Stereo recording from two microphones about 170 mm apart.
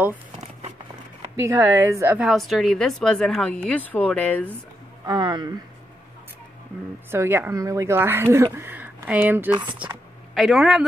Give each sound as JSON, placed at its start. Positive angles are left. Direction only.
{"t": 1.4, "sound": "speech", "side_deg": -15}
{"t": 2.2, "sound": "speech", "side_deg": 0}
{"t": 5.0, "sound": "speech", "side_deg": -25}
{"t": 7.1, "sound": "speech", "side_deg": -15}
{"t": 9.6, "sound": "speech", "side_deg": -25}
{"t": 10.3, "sound": "speech", "side_deg": 0}